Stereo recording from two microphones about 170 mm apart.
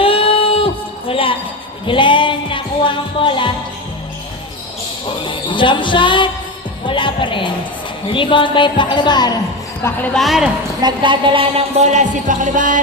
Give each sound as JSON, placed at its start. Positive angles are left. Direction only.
{"t": 0.0, "sound": "a sound", "side_deg": 30}
{"t": 1.9, "sound": "music", "side_deg": 30}
{"t": 5.2, "sound": "a woman's voice", "side_deg": 30}
{"t": 9.8, "sound": "speech", "side_deg": 15}
{"t": 10.2, "sound": "a woman's voice", "side_deg": 0}
{"t": 10.8, "sound": "music", "side_deg": -30}